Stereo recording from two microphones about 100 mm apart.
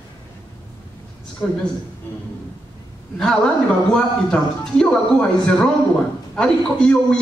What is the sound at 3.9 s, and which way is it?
A man's voice, 5° left (ahead or behind).